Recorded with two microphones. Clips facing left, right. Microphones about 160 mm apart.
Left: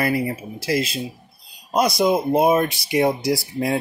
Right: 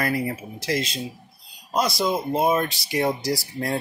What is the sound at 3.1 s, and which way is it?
Speech, 60° left (ahead or behind).